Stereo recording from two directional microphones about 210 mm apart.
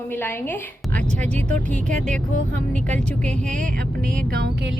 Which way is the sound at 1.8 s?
35° right (ahead or behind).